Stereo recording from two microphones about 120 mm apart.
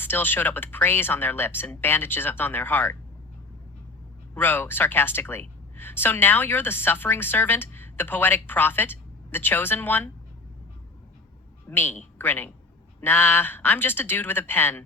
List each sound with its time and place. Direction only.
0.0 s speech: 15° left (ahead or behind)
4.4 s speech: 15° left (ahead or behind)
11.7 s speech: 15° left (ahead or behind)